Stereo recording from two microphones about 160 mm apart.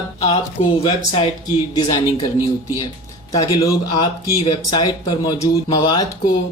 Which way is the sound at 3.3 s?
20° left (ahead or behind).